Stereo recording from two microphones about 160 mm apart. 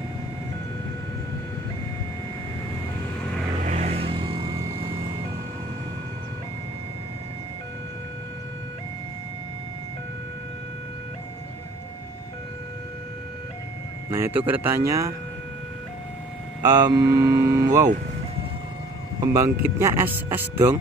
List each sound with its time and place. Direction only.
3.6 s music: 45° right (ahead or behind); by 4.7 s 20° right (ahead or behind)
14.1 s speech: 15° right (ahead or behind)
16.6 s mantra: 25° right (ahead or behind)
19.1 s speech: 20° right (ahead or behind)